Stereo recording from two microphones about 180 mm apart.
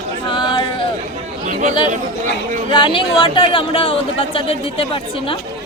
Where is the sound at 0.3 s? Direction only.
25° left (ahead or behind).